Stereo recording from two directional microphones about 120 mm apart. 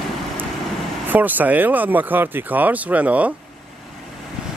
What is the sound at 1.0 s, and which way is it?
Speech, 15° right (ahead or behind).